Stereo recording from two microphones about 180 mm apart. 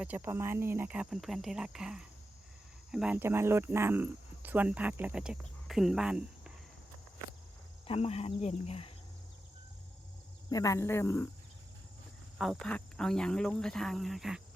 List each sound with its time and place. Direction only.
0.0 s speech: 10° right (ahead or behind)
7.9 s speech: 35° left (ahead or behind)
10.5 s speech: 20° left (ahead or behind)
12.4 s speech: centre (ahead or behind)